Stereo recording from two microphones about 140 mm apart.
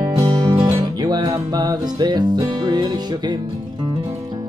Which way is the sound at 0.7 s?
25° right (ahead or behind).